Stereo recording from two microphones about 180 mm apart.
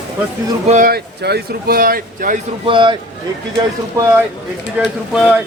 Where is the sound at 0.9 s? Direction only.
60° right (ahead or behind).